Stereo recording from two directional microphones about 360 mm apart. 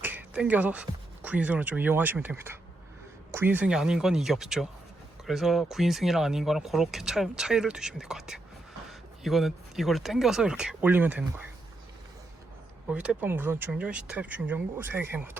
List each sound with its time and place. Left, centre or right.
0.0 s speech: centre
12.9 s speech: centre